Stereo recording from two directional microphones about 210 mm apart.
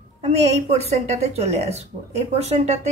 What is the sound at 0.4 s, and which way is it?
A woman's voice, 30° right (ahead or behind).